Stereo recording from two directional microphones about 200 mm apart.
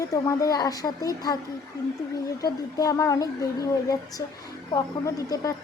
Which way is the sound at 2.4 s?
20° left (ahead or behind).